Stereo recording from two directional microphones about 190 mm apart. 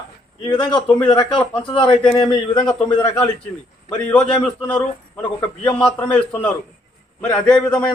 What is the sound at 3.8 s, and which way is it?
A man's voice, 5° left (ahead or behind).